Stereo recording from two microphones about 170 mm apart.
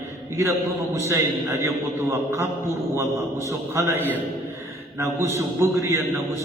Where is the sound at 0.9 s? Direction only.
15° right (ahead or behind).